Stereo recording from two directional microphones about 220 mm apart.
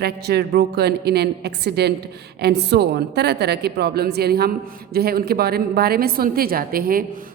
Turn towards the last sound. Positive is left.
turn(degrees=-40)  # may be behind; listen again after turning